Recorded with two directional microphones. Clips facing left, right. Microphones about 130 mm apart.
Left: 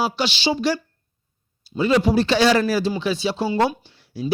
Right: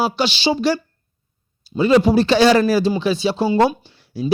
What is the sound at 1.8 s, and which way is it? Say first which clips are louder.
Speech: right 4 dB; 35° right (ahead or behind).